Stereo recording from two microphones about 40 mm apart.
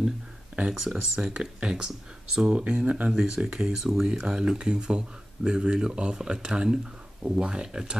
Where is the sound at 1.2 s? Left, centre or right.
Right.